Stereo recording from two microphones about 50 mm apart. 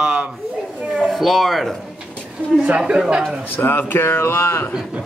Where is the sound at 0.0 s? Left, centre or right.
Right.